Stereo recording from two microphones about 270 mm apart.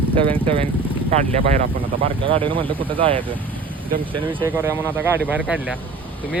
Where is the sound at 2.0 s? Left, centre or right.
Centre.